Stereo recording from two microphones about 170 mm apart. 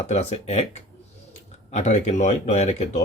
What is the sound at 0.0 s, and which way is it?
Speech, 40° left (ahead or behind).